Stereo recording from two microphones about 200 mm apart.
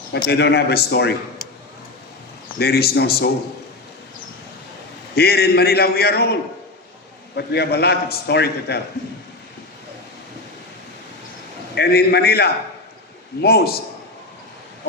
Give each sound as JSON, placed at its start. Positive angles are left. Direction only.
{"t": 0.1, "sound": "a man's voice", "side_deg": 55}
{"t": 2.6, "sound": "a man's voice", "side_deg": 50}
{"t": 5.1, "sound": "a man's voice", "side_deg": 50}
{"t": 7.3, "sound": "a man's voice", "side_deg": 55}
{"t": 11.7, "sound": "a man's voice", "side_deg": 50}